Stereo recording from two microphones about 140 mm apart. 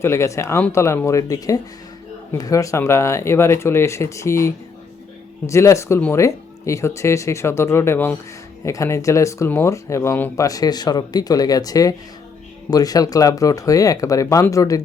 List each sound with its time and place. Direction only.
0.0 s speech: 20° left (ahead or behind)